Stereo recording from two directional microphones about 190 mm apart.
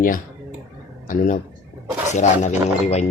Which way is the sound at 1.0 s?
45° left (ahead or behind).